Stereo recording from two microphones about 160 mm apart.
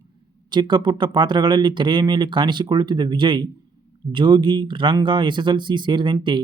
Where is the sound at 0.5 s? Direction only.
30° right (ahead or behind).